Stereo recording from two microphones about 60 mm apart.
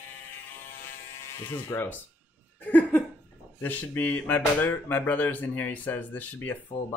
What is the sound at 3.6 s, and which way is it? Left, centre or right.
Speech, left.